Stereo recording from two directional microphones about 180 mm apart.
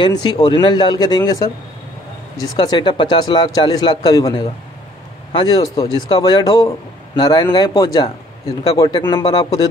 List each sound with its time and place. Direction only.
0.0 s speech: 25° left (ahead or behind)